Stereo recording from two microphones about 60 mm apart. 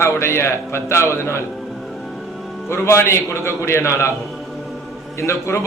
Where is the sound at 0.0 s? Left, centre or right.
Left.